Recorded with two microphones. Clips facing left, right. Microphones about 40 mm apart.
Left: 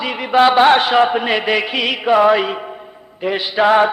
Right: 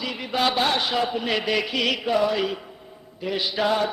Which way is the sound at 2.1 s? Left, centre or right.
Left.